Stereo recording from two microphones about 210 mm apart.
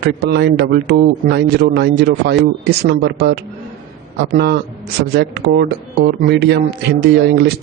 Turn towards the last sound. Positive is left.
turn(degrees=-50)  # may be behind; listen again after turning